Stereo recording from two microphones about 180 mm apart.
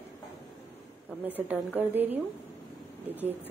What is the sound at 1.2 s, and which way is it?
Speech, 10° right (ahead or behind).